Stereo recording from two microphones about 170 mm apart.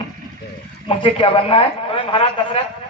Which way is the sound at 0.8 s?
30° left (ahead or behind).